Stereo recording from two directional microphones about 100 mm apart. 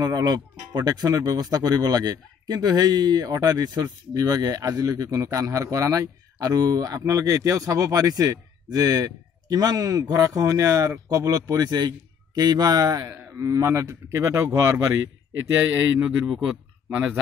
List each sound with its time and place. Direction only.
0.0 s a man's voice: 45° right (ahead or behind)
15.6 s a man's voice: 10° right (ahead or behind)
16.3 s speech: centre (ahead or behind)